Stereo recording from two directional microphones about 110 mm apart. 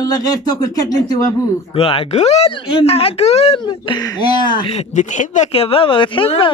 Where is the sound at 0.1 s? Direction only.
35° left (ahead or behind).